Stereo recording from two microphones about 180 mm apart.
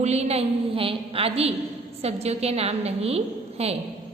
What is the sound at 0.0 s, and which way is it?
A woman's voice, 35° right (ahead or behind).